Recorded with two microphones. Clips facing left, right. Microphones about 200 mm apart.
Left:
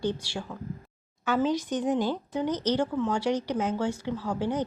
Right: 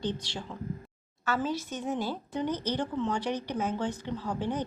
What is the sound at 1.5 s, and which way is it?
A woman's voice, 15° left (ahead or behind).